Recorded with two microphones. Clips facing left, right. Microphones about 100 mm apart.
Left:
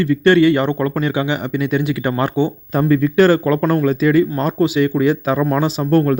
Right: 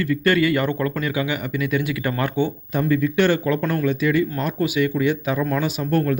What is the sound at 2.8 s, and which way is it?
Speech, 45° left (ahead or behind).